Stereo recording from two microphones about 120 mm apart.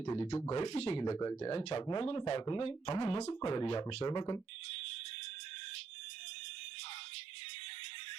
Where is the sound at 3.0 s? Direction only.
60° left (ahead or behind); by 4.4 s 35° left (ahead or behind).